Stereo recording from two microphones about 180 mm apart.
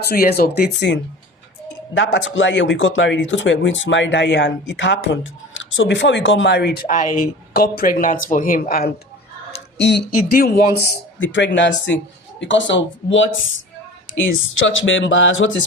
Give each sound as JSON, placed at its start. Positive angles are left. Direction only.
{"t": 0.0, "sound": "speech", "side_deg": 60}
{"t": 2.1, "sound": "speech", "side_deg": 90}
{"t": 9.7, "sound": "speech", "side_deg": 75}
{"t": 10.2, "sound": "speech", "side_deg": 55}
{"t": 11.2, "sound": "speech", "side_deg": 90}
{"t": 14.7, "sound": "speech", "side_deg": 90}